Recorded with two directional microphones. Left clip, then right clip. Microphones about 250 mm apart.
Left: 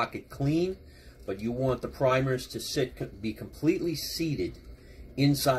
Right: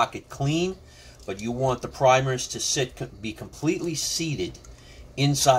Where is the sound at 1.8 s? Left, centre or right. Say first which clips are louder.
Right 8 dB; centre.